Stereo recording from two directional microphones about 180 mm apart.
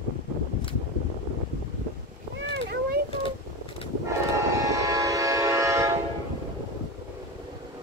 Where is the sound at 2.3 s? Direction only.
75° right (ahead or behind).